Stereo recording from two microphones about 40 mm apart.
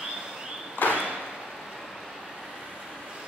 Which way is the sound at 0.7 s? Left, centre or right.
Left.